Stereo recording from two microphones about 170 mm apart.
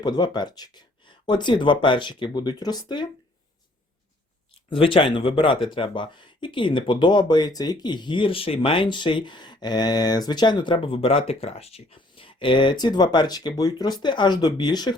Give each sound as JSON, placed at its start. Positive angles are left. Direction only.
{"t": 0.0, "sound": "speech", "side_deg": 25}
{"t": 4.7, "sound": "speech", "side_deg": 30}